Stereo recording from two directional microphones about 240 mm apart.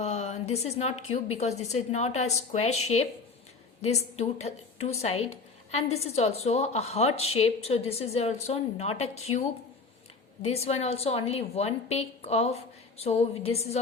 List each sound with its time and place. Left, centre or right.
0.0 s a sound: left
1.1 s a woman's voice: left
3.8 s a woman's voice: left
10.4 s a woman's voice: left